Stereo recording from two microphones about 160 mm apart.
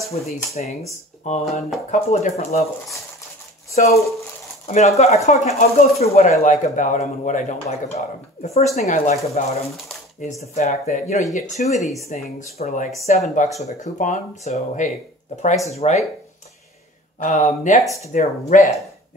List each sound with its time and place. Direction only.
0.6 s speech: 50° left (ahead or behind)
4.7 s speech: 45° left (ahead or behind)
11.8 s speech: centre (ahead or behind)
12.4 s speech: 45° left (ahead or behind)
17.2 s speech: 50° left (ahead or behind)